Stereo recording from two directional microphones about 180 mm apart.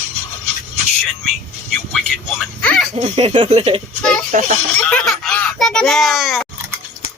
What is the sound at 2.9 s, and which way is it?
Speech, 30° right (ahead or behind).